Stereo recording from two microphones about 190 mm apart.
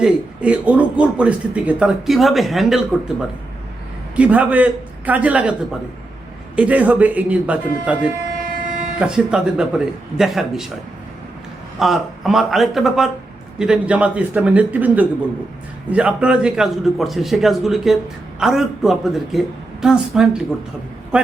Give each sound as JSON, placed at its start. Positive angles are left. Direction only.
{"t": 0.0, "sound": "speech", "side_deg": -5}
{"t": 6.6, "sound": "a man's voice", "side_deg": -5}
{"t": 11.8, "sound": "a man's voice", "side_deg": 0}